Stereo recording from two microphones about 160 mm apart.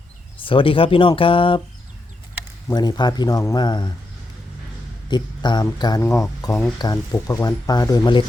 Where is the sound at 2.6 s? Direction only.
25° left (ahead or behind).